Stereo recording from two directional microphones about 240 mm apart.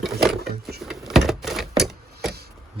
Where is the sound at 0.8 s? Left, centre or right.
Centre.